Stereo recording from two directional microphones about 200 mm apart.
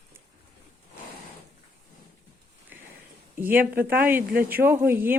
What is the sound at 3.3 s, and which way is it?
Speech, 10° right (ahead or behind).